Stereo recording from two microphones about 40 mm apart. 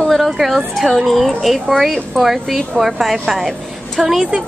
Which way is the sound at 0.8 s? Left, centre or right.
Centre.